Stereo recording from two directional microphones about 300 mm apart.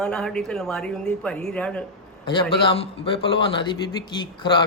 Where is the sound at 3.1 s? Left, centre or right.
Centre.